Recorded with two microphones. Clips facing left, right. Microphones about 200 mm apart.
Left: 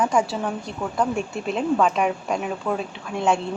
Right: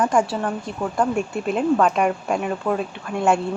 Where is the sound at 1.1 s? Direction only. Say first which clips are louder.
Right 3 dB; 5° right (ahead or behind).